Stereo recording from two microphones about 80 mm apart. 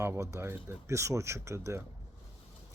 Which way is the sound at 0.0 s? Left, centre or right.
Right.